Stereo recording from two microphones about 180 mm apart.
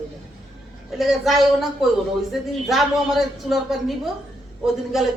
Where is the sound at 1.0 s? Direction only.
Centre (ahead or behind).